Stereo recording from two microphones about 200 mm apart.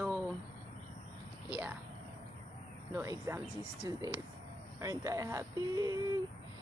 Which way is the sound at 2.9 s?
15° right (ahead or behind).